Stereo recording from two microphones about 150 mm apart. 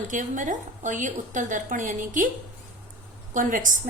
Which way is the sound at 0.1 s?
60° right (ahead or behind).